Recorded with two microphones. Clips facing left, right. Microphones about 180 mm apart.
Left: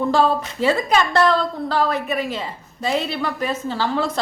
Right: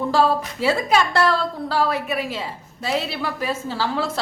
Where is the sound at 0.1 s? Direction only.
5° right (ahead or behind).